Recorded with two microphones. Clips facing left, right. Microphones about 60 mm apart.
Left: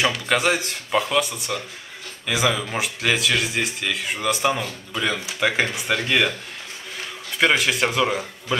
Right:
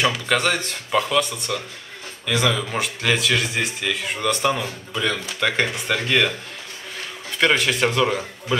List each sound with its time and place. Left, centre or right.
0.0 s speech: centre
7.3 s speech: centre